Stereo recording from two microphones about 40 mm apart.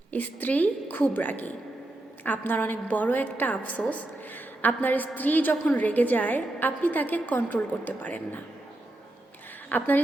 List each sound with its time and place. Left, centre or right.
0.1 s a woman's voice: left
9.6 s a woman's voice: left